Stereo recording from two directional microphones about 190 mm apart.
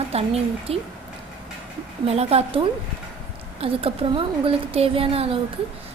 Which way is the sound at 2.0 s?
35° right (ahead or behind).